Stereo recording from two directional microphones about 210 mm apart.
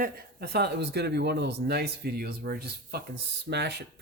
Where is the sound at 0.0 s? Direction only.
45° right (ahead or behind).